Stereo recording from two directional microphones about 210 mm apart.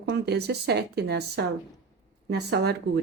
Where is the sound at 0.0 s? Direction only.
55° right (ahead or behind).